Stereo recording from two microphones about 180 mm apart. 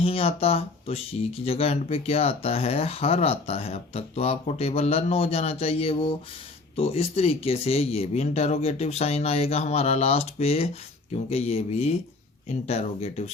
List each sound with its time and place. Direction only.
0.0 s speech: 30° left (ahead or behind)